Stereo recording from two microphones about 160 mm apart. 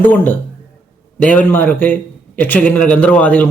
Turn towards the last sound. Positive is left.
turn(degrees=10)  # may be behind; listen again after turning